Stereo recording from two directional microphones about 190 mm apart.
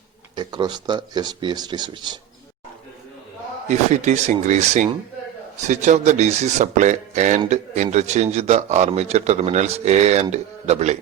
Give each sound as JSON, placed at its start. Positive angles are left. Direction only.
{"t": 0.3, "sound": "speech", "side_deg": -25}
{"t": 3.7, "sound": "speech", "side_deg": -40}